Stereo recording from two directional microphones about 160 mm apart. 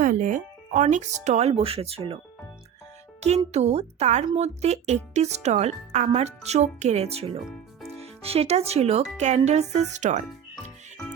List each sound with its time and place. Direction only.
0.0 s speech: 55° right (ahead or behind); by 2.1 s 40° right (ahead or behind)
3.2 s speech: 45° right (ahead or behind)
7.4 s music: centre (ahead or behind)
8.0 s speech: 40° right (ahead or behind)